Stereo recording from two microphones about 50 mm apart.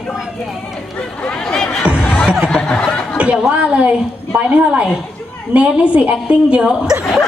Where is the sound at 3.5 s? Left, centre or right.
Right.